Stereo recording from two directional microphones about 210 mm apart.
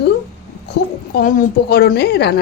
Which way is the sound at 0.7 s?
45° left (ahead or behind).